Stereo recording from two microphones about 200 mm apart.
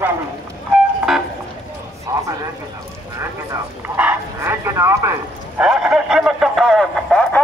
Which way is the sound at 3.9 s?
10° right (ahead or behind).